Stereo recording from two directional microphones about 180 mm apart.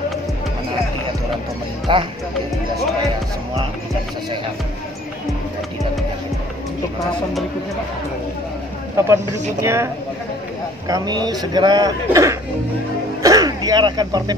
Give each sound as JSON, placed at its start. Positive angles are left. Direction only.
{"t": 1.9, "sound": "a man's voice", "side_deg": -25}
{"t": 8.9, "sound": "speech", "side_deg": -15}
{"t": 10.9, "sound": "a man's voice", "side_deg": -25}
{"t": 13.2, "sound": "a sound", "side_deg": -20}